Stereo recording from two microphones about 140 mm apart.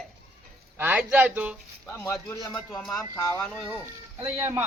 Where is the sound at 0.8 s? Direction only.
10° right (ahead or behind).